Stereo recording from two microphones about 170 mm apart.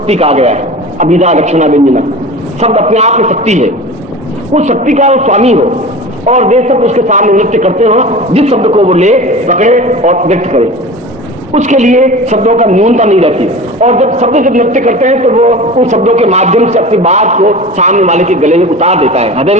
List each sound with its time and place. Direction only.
0.1 s a woman's voice: 40° right (ahead or behind)